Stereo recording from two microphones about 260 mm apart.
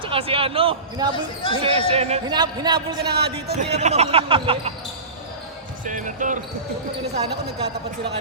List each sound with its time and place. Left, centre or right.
0.0 s speech: right
1.1 s speech: centre
1.6 s speech: right
3.2 s speech: right
3.7 s speech: right
5.8 s speech: right